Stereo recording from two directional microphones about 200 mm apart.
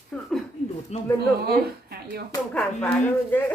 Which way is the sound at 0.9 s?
35° left (ahead or behind).